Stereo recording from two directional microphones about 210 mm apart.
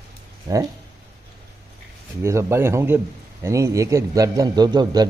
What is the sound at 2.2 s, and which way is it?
A man's voice, 15° right (ahead or behind).